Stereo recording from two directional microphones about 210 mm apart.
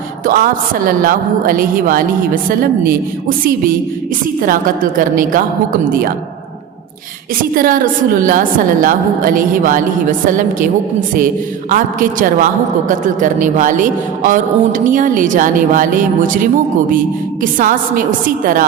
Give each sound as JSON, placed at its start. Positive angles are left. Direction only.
{"t": 0.3, "sound": "a woman's voice", "side_deg": -45}
{"t": 7.5, "sound": "a man's voice", "side_deg": -40}
{"t": 11.7, "sound": "a man's voice", "side_deg": -40}